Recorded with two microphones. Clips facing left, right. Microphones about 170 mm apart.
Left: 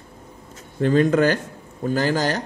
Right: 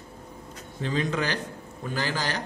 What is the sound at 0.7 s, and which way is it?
Speech, 50° left (ahead or behind).